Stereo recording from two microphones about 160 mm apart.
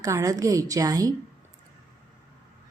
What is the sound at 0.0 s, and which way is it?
A woman's voice, 20° right (ahead or behind).